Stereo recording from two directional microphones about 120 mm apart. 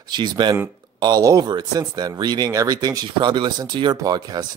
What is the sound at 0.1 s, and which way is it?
Speech, 40° right (ahead or behind).